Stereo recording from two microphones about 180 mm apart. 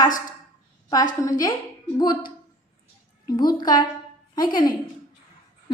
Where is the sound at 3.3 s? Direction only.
25° left (ahead or behind).